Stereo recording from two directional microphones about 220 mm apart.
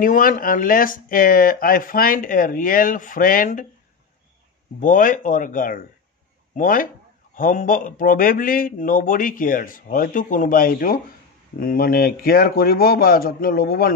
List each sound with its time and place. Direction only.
0.0 s speech: 40° left (ahead or behind)
4.7 s a man's voice: 35° left (ahead or behind)